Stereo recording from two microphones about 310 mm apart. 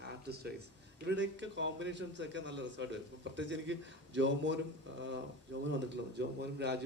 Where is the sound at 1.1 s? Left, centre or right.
Right.